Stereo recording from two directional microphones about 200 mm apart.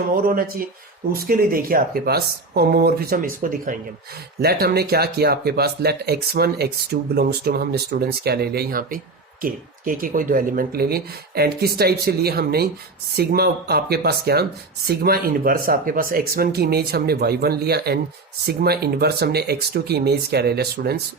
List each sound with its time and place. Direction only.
0.2 s speech: 45° right (ahead or behind)
4.4 s speech: 55° right (ahead or behind)